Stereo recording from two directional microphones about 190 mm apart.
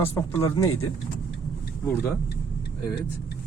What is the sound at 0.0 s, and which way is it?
Speech, 15° left (ahead or behind).